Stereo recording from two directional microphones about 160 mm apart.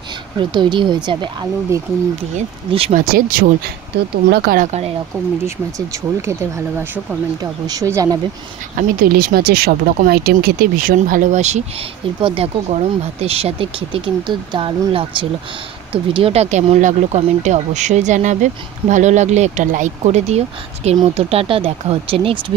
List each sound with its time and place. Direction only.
0.4 s speech: 30° right (ahead or behind)
2.9 s speech: 60° right (ahead or behind)
4.6 s speech: 40° right (ahead or behind)
5.4 s speech: 15° right (ahead or behind)
7.6 s speech: 20° right (ahead or behind)
8.7 s speech: 65° right (ahead or behind); by 11.6 s 45° right (ahead or behind)
12.2 s speech: 35° right (ahead or behind)